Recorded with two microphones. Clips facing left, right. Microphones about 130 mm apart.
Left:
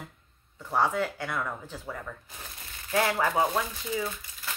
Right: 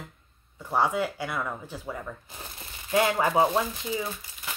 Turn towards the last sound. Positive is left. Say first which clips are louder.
# even
turn(degrees=-15)  # may be behind; listen again after turning